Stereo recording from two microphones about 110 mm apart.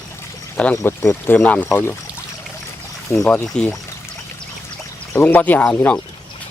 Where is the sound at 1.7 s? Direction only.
25° left (ahead or behind).